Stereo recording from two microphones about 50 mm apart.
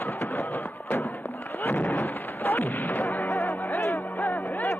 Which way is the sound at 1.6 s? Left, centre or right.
Left.